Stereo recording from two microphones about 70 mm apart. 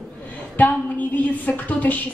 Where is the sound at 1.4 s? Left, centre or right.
Left.